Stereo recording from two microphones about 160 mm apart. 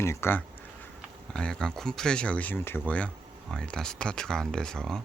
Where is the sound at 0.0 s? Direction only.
15° left (ahead or behind).